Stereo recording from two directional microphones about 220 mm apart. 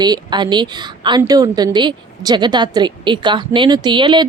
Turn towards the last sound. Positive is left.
turn(degrees=-20)  # may be behind; listen again after turning